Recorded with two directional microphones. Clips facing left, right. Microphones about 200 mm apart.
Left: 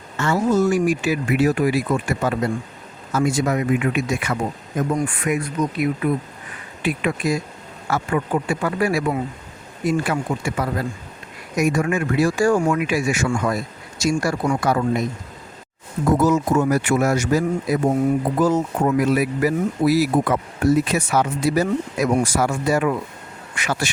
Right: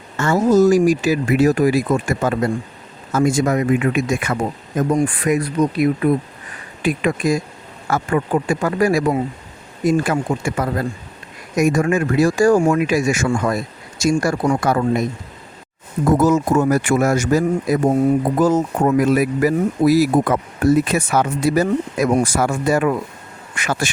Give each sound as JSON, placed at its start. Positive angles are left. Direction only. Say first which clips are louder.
{"t": 0.2, "sound": "speech", "louder": "right 5 dB", "side_deg": -45}
{"t": 4.9, "sound": "speech", "louder": "right 5 dB", "side_deg": -35}
{"t": 12.9, "sound": "speech", "louder": "right 3 dB", "side_deg": -45}
{"t": 16.1, "sound": "speech", "louder": "right 2 dB", "side_deg": -45}